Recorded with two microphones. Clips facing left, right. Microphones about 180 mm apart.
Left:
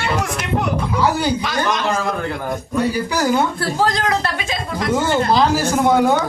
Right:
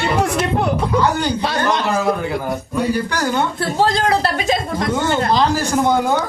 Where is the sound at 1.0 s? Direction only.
5° left (ahead or behind).